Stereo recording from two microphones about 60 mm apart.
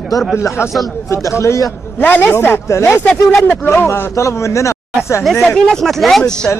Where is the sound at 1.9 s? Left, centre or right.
Left.